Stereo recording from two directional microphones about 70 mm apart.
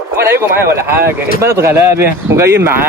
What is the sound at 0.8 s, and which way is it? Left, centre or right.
Speech, right.